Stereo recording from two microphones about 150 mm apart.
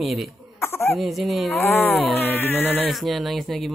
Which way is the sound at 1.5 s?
15° left (ahead or behind).